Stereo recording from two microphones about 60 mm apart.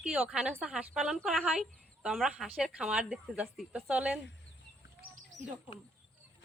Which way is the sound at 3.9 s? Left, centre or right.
Right.